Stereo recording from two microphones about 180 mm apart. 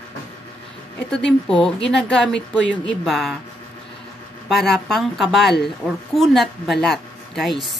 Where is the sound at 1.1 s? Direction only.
5° left (ahead or behind).